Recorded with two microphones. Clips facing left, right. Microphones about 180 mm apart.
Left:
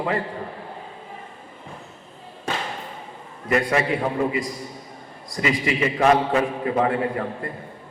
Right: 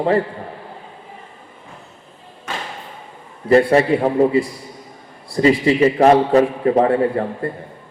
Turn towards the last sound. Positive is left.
turn(degrees=-30)  # may be behind; listen again after turning